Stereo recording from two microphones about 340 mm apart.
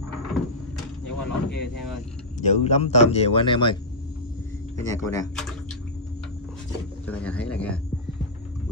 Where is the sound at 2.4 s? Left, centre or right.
Centre.